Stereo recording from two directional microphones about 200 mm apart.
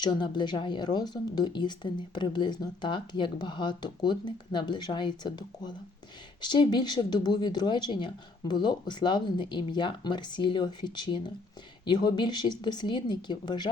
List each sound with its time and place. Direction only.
0.0 s a woman's voice: 20° left (ahead or behind)